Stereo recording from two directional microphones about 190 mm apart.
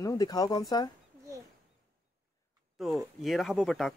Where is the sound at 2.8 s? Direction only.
Centre (ahead or behind).